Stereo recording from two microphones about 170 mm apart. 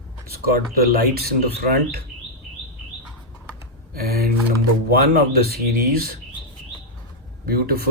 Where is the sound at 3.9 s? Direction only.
65° right (ahead or behind).